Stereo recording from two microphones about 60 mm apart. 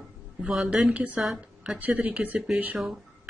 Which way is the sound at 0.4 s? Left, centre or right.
Centre.